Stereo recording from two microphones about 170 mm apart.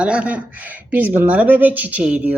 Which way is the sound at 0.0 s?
5° right (ahead or behind).